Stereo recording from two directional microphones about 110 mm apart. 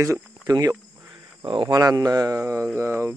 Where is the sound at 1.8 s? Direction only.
30° right (ahead or behind).